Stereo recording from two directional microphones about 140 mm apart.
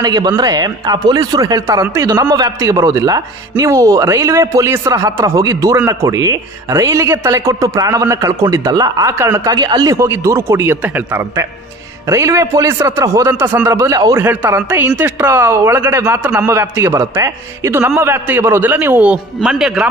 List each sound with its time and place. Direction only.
0.0 s a man's voice: 30° right (ahead or behind); by 19.9 s 5° right (ahead or behind)